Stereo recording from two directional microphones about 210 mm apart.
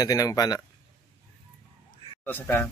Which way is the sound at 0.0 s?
15° left (ahead or behind).